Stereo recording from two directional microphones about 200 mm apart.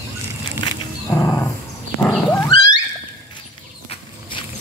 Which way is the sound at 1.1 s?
15° left (ahead or behind).